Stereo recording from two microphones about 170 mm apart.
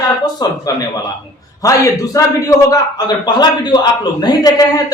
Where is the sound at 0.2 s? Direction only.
20° left (ahead or behind).